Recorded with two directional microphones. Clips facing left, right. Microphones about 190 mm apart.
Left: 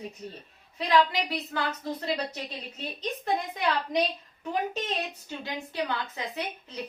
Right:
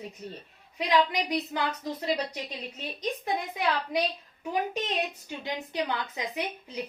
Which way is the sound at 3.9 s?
5° right (ahead or behind).